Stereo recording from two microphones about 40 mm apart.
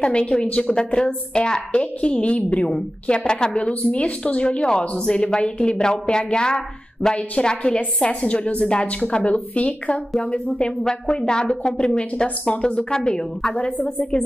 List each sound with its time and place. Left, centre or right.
0.0 s a woman's voice: left
14.1 s a woman's voice: left